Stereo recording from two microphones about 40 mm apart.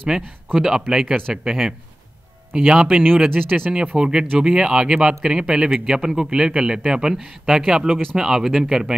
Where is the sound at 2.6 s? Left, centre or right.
Right.